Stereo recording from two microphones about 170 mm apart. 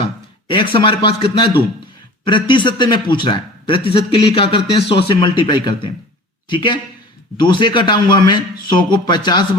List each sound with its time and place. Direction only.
0.0 s a man's voice: 30° left (ahead or behind)